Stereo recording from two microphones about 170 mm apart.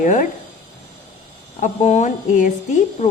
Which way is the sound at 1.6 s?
45° left (ahead or behind).